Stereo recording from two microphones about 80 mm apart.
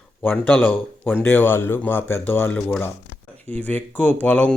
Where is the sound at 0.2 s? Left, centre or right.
Left.